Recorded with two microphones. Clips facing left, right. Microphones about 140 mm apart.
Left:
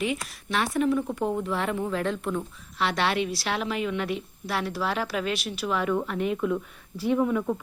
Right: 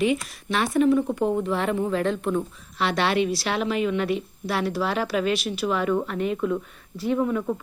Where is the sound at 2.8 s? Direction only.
Centre (ahead or behind).